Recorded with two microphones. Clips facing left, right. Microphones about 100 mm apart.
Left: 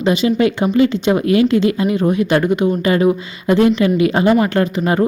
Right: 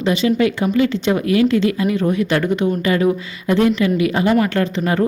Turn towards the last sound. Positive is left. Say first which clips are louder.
# left 2 dB
turn(degrees=20)  # may be behind; listen again after turning